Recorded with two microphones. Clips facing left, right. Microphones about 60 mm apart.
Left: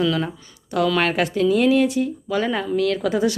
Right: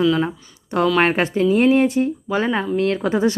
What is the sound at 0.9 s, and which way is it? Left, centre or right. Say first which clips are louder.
Speech: right 3 dB; right.